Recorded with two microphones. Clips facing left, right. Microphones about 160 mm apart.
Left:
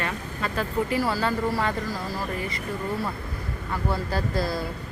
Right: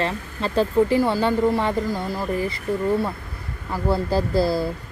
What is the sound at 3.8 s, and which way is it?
Speech, 30° right (ahead or behind).